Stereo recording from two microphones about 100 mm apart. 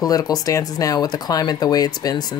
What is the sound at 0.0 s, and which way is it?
Speech, 40° left (ahead or behind).